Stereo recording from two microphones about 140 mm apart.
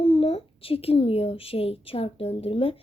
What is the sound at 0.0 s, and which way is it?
Speech, 45° left (ahead or behind).